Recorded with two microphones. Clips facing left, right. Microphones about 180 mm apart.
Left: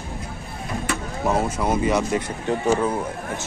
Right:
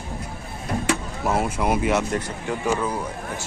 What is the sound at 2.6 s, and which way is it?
Speech, 30° left (ahead or behind).